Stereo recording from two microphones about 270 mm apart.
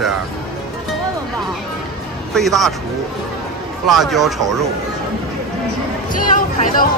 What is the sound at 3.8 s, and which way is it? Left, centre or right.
Speech, centre.